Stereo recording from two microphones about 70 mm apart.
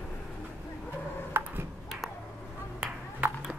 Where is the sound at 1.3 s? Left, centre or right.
Right.